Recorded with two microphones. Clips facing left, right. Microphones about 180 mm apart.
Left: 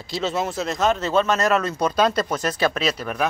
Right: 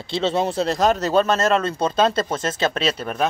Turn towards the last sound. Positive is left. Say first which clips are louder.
# right 1 dB
turn(degrees=-30)  # may be behind; listen again after turning